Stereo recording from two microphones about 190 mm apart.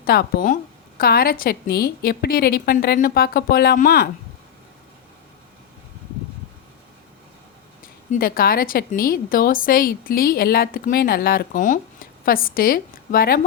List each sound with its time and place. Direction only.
0.0 s a woman's voice: 55° left (ahead or behind)
8.1 s a woman's voice: 50° left (ahead or behind)